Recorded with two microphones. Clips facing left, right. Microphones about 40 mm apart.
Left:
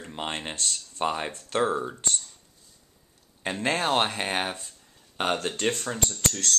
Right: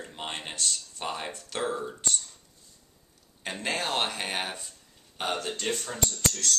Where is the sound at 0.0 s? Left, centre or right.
Centre.